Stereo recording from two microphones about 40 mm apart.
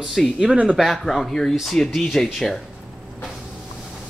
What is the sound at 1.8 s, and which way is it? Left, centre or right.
Speech, left.